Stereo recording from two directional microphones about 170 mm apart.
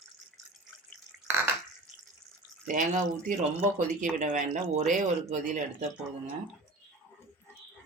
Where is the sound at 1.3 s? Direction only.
15° right (ahead or behind).